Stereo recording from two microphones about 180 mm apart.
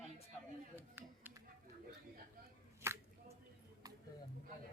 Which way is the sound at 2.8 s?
15° right (ahead or behind).